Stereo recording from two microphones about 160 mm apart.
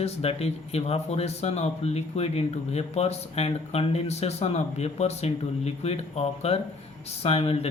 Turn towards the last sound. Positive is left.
turn(degrees=40)  # may be behind; listen again after turning